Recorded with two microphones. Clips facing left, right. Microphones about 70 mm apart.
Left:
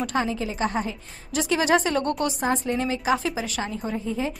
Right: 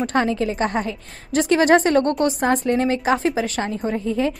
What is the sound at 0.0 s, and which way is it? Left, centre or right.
A woman's voice, right.